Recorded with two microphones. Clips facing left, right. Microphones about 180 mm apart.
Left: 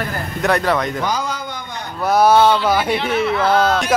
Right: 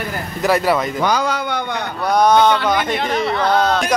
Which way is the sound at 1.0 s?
70° right (ahead or behind).